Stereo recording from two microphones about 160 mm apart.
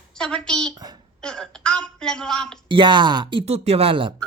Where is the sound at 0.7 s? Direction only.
25° right (ahead or behind).